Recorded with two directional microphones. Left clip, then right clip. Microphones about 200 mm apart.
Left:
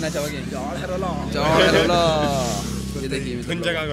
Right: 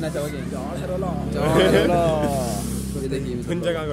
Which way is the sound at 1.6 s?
60° right (ahead or behind).